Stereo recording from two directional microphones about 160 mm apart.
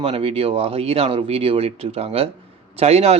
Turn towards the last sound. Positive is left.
turn(degrees=-40)  # may be behind; listen again after turning